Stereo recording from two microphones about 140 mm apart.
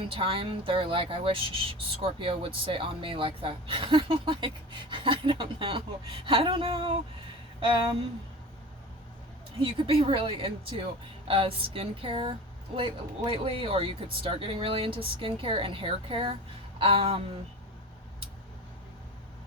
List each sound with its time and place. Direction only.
0.1 s speech: 40° right (ahead or behind)
9.6 s speech: 40° right (ahead or behind)